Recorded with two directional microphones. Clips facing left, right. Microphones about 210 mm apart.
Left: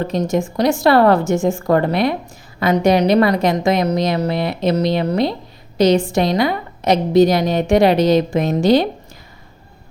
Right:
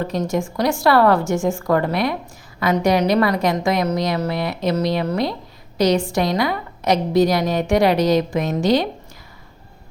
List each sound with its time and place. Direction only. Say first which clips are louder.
0.3 s a woman's voice: left 5 dB; 20° left (ahead or behind)